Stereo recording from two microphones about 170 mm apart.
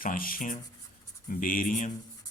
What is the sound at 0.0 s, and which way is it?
Speech, 55° left (ahead or behind).